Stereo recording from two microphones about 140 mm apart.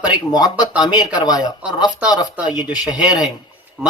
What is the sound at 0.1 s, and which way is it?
Speech, 30° left (ahead or behind).